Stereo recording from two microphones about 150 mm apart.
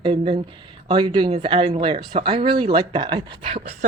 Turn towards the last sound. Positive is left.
turn(degrees=-35)  # may be behind; listen again after turning